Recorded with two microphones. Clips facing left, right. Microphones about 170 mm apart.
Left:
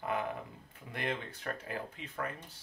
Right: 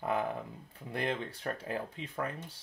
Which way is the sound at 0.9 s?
30° right (ahead or behind).